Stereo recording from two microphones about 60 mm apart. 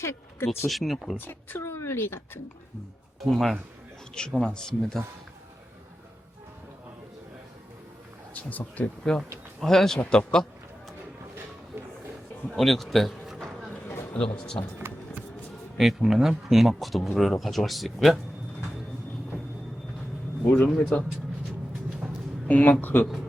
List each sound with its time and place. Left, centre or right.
0.0 s speech: left
0.7 s speech: centre
1.2 s speech: left
3.2 s speech: centre
8.3 s speech: left
9.6 s speech: centre
12.5 s speech: centre
14.1 s speech: centre
15.8 s speech: centre
20.7 s speech: centre
22.4 s speech: left